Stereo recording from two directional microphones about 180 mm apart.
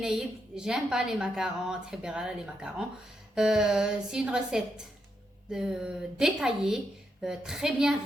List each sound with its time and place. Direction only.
0.0 s a woman's voice: 5° right (ahead or behind)